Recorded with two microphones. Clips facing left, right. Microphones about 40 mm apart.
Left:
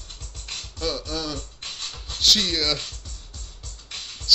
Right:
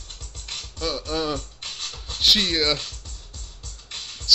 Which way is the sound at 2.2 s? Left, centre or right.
Centre.